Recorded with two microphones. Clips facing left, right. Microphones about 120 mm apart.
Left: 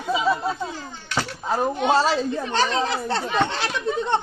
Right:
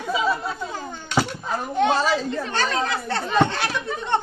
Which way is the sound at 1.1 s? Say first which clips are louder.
Right 4 dB; 20° right (ahead or behind).